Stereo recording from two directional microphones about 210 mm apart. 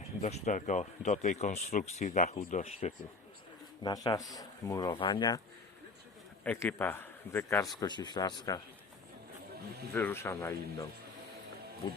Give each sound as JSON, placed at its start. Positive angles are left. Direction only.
{"t": 0.2, "sound": "speech", "side_deg": 30}
{"t": 3.8, "sound": "speech", "side_deg": 20}
{"t": 6.4, "sound": "speech", "side_deg": 10}
{"t": 9.9, "sound": "speech", "side_deg": 10}